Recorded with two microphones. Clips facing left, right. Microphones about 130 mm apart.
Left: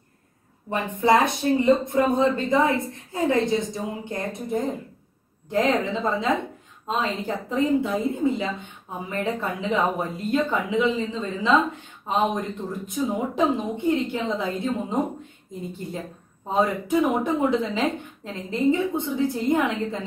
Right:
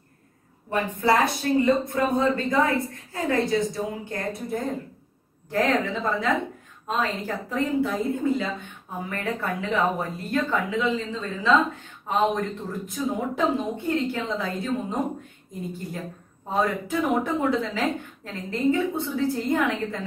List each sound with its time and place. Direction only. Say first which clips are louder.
0.7 s a woman's voice: left 2 dB; 20° left (ahead or behind)